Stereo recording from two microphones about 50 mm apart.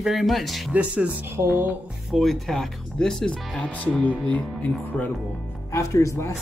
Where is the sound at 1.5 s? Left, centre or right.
Right.